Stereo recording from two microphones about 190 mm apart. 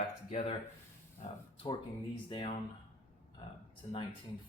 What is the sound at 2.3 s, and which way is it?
Speech, 30° left (ahead or behind).